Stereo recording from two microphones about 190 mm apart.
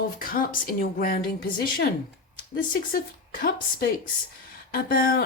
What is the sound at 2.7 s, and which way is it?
Speech, 50° left (ahead or behind).